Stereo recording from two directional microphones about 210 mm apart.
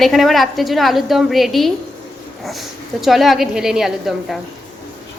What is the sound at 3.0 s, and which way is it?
A woman's voice, centre (ahead or behind).